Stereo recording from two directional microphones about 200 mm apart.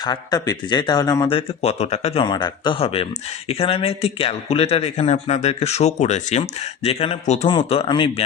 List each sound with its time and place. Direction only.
0.0 s a man's voice: 20° left (ahead or behind)